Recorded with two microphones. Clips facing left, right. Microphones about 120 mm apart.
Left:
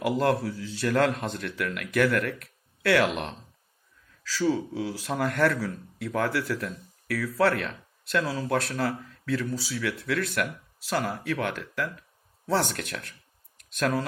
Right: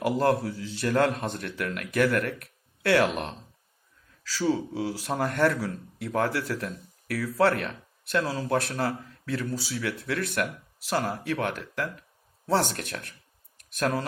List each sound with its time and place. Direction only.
0.2 s speech: 30° right (ahead or behind)
2.3 s a sound: 25° right (ahead or behind)
4.2 s speech: 30° right (ahead or behind)